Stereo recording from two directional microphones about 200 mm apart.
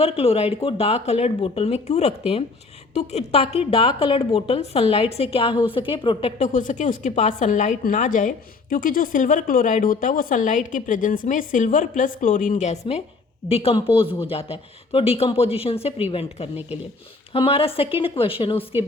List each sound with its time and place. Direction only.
0.0 s a woman's voice: 30° left (ahead or behind)